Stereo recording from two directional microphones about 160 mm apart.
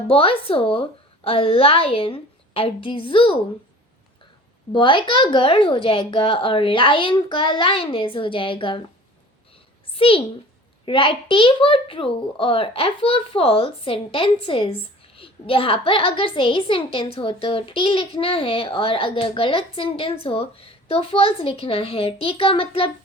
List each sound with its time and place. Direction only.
0.1 s a child's voice: 35° left (ahead or behind)
4.7 s a child's voice: 30° left (ahead or behind)
9.9 s a child's voice: 35° left (ahead or behind)